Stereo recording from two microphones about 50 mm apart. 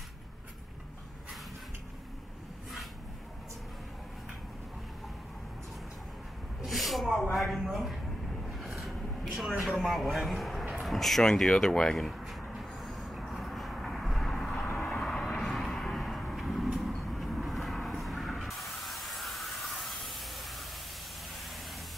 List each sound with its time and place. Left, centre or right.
6.6 s a sound: centre
7.6 s a man's voice: centre
8.5 s vehicle: centre
9.7 s a man's voice: centre
12.1 s a sound: centre
12.5 s vehicle: centre
14.7 s vehicle: centre
17.8 s spray: centre